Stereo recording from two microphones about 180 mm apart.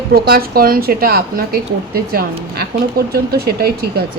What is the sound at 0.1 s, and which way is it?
A woman's voice, 55° right (ahead or behind).